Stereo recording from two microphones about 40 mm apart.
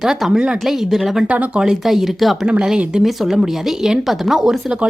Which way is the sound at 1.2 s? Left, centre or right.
Right.